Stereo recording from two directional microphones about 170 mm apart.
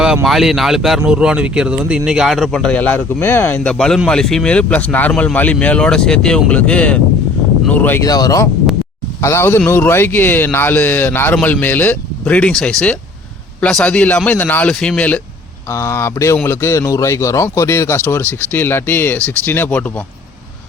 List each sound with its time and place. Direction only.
0.3 s speech: centre (ahead or behind)
8.0 s speech: 20° left (ahead or behind)